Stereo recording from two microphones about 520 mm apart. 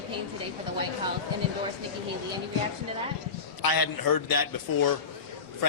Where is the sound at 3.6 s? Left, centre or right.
Left.